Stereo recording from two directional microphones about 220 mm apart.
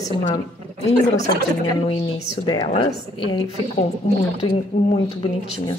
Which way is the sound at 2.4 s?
20° left (ahead or behind).